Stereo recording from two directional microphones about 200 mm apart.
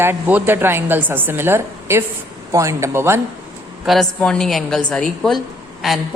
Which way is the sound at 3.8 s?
Centre (ahead or behind).